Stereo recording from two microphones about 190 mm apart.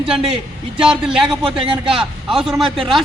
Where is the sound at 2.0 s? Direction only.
Centre (ahead or behind).